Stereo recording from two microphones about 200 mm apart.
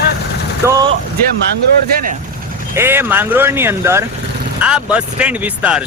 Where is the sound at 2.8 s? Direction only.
10° right (ahead or behind).